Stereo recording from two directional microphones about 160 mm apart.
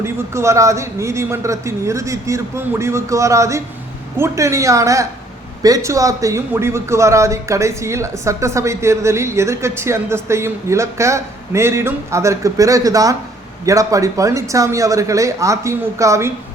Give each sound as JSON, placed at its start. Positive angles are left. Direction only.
{"t": 0.0, "sound": "speech", "side_deg": -15}